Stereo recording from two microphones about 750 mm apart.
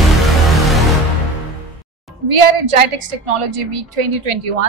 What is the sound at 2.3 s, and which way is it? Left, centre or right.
A woman's voice, right.